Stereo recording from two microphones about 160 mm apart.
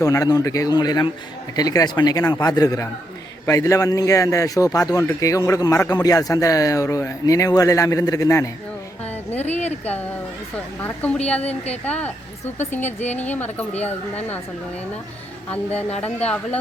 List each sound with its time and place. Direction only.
0.0 s a man's voice: 20° left (ahead or behind)
9.4 s speech: 45° left (ahead or behind)
10.8 s speech: 10° left (ahead or behind)